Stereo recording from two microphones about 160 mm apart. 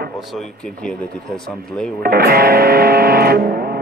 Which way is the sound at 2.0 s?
70° right (ahead or behind).